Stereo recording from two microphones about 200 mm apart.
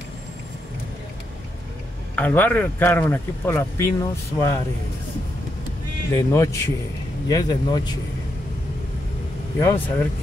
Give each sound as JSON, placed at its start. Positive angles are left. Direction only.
{"t": 2.1, "sound": "speech", "side_deg": 10}
{"t": 6.1, "sound": "speech", "side_deg": 15}
{"t": 9.6, "sound": "speech", "side_deg": 10}